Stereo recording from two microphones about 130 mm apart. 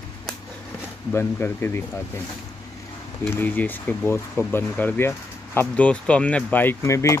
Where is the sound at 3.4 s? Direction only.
15° left (ahead or behind).